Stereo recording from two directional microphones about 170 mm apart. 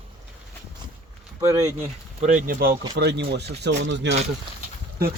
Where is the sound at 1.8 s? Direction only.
45° right (ahead or behind).